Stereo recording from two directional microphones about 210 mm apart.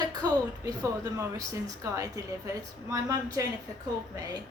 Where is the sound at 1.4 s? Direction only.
15° right (ahead or behind).